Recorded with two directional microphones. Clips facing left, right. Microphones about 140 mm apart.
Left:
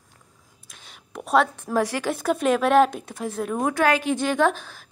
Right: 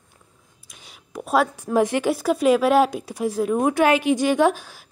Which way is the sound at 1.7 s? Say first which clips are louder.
Right 4 dB; 15° right (ahead or behind).